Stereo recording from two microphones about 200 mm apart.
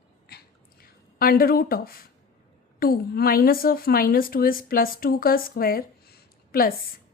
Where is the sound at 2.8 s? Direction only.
50° left (ahead or behind).